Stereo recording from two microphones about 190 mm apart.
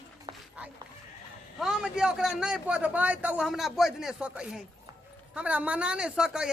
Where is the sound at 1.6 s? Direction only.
5° right (ahead or behind).